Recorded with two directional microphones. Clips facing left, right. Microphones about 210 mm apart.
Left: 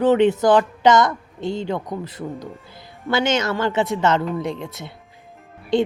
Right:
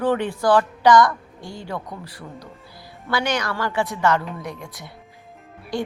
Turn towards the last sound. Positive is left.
turn(degrees=20)  # may be behind; listen again after turning